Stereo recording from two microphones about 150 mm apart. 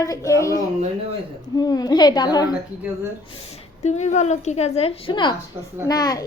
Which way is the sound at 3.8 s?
50° left (ahead or behind).